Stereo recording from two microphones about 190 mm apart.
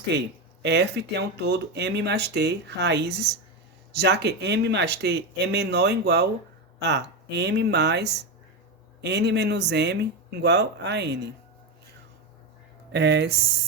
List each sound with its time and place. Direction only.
0.1 s speech: 65° right (ahead or behind)
12.9 s speech: 65° right (ahead or behind)